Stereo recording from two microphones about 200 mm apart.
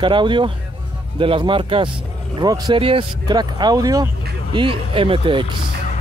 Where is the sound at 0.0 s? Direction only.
25° right (ahead or behind).